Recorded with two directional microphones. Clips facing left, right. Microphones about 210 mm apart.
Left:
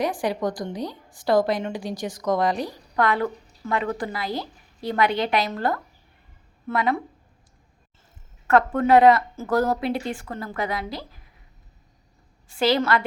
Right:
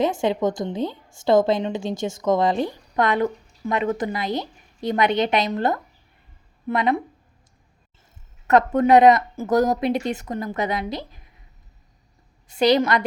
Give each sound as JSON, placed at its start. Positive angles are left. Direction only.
{"t": 0.0, "sound": "a woman's voice", "side_deg": -25}
{"t": 8.4, "sound": "a woman's voice", "side_deg": -20}
{"t": 12.5, "sound": "a woman's voice", "side_deg": -20}